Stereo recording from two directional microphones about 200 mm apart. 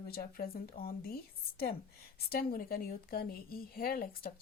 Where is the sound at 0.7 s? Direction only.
30° left (ahead or behind).